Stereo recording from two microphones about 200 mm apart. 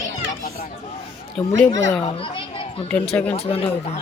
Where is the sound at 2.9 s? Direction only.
5° left (ahead or behind).